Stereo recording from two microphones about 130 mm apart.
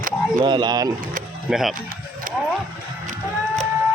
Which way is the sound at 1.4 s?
5° right (ahead or behind).